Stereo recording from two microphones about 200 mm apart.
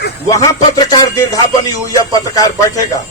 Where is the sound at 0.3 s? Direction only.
15° left (ahead or behind).